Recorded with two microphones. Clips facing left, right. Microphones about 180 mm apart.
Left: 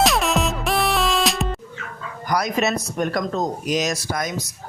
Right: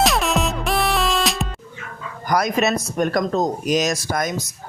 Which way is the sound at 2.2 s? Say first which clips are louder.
Right 2 dB; 50° right (ahead or behind).